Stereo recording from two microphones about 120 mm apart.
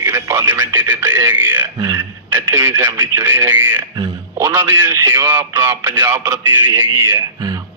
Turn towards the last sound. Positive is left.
turn(degrees=-25)  # may be behind; listen again after turning